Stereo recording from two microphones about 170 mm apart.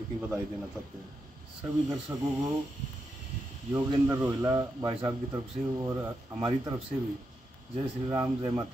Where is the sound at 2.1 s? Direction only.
15° right (ahead or behind).